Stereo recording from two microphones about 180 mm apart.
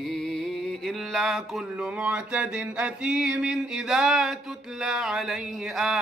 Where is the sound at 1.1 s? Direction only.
Centre (ahead or behind).